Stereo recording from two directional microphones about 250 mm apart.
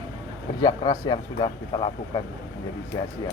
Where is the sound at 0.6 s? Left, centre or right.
Centre.